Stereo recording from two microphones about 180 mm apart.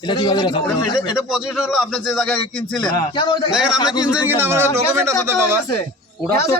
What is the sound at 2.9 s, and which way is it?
Speech, 25° left (ahead or behind).